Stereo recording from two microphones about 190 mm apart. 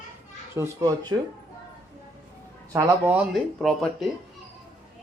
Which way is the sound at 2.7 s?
15° right (ahead or behind).